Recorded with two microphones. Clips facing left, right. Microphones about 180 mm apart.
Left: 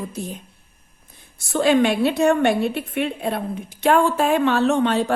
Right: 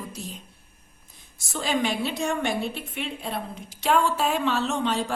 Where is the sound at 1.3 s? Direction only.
60° left (ahead or behind).